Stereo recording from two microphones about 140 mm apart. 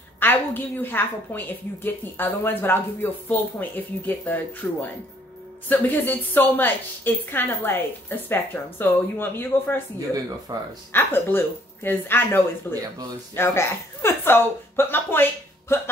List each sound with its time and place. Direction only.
0.2 s a woman's voice: 15° left (ahead or behind)
10.5 s speech: 30° right (ahead or behind)
10.9 s a woman's voice: 15° left (ahead or behind)